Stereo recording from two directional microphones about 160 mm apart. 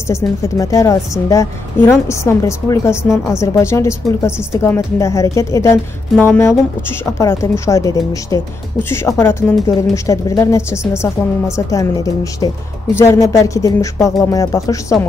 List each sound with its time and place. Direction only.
0.6 s a woman's voice: 20° left (ahead or behind)